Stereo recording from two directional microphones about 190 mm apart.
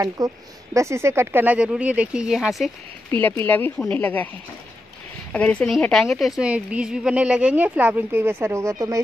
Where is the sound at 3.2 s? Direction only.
10° left (ahead or behind).